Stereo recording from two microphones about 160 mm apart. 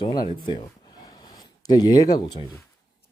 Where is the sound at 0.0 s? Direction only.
25° left (ahead or behind).